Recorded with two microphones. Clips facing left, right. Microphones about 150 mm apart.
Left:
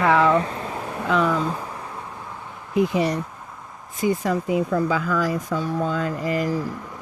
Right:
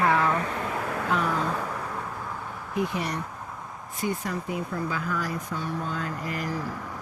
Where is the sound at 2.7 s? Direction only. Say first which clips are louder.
Left 8 dB; 90° left.